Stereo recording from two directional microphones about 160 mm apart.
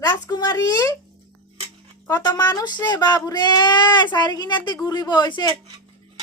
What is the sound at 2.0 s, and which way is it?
Speech, 25° left (ahead or behind).